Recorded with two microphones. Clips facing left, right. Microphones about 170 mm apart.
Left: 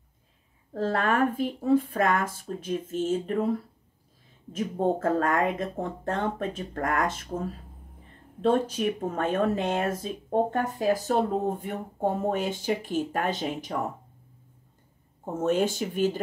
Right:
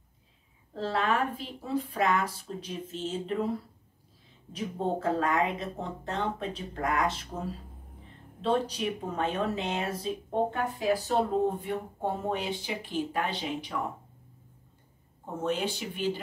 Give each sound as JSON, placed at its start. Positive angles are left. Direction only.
{"t": 0.7, "sound": "speech", "side_deg": 50}
{"t": 4.5, "sound": "speech", "side_deg": 50}
{"t": 15.2, "sound": "speech", "side_deg": 45}